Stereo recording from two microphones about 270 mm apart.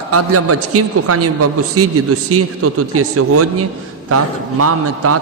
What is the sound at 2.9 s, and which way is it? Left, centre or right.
A man's voice, right.